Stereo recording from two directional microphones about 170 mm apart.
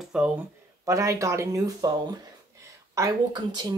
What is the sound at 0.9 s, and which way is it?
Speech, 20° right (ahead or behind).